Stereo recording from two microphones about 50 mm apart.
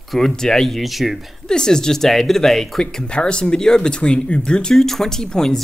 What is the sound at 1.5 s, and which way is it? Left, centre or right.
Speech, centre.